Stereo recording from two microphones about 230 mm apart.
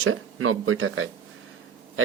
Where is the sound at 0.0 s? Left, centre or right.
Right.